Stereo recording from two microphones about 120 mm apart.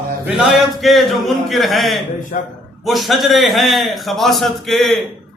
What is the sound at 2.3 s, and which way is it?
Speech, 90° left.